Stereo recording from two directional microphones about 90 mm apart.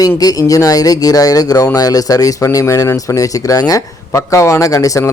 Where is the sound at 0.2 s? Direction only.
45° left (ahead or behind).